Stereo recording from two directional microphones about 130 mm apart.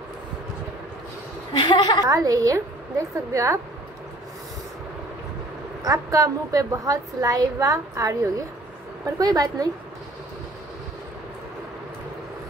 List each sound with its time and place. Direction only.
1.6 s a woman's voice: 35° left (ahead or behind)
2.0 s a woman's voice: 25° right (ahead or behind)
5.9 s a woman's voice: 25° right (ahead or behind)